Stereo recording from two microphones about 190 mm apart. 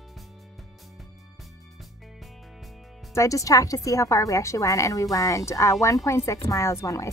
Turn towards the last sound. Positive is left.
turn(degrees=15)  # may be behind; listen again after turning